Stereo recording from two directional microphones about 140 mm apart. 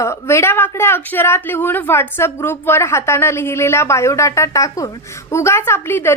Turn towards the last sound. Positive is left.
turn(degrees=15)  # may be behind; listen again after turning